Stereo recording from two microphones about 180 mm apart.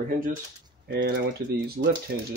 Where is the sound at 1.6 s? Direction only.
60° right (ahead or behind).